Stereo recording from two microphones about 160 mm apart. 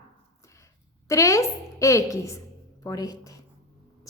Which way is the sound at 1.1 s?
20° left (ahead or behind).